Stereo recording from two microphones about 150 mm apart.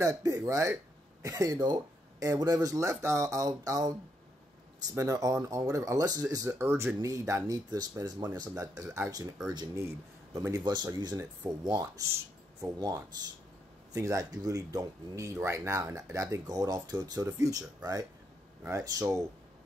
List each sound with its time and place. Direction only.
0.0 s speech: 20° right (ahead or behind)
9.5 s speech: 30° right (ahead or behind)
12.6 s speech: 20° right (ahead or behind)